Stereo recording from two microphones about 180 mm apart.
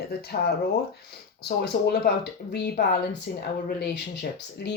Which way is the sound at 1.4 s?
65° left (ahead or behind).